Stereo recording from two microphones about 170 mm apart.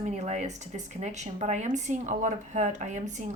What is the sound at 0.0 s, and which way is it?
A woman's voice, 45° right (ahead or behind).